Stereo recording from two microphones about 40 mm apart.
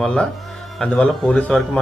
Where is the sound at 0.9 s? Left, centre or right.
Left.